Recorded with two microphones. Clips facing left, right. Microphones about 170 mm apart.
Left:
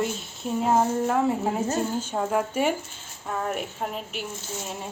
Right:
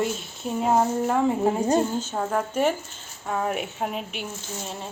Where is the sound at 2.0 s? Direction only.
10° left (ahead or behind).